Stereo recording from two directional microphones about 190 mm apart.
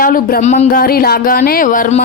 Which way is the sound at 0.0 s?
50° left (ahead or behind).